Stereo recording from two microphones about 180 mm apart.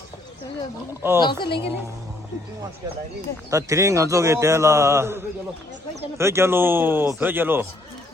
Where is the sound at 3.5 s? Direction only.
15° right (ahead or behind).